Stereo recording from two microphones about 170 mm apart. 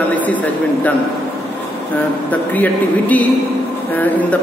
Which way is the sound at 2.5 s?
10° left (ahead or behind).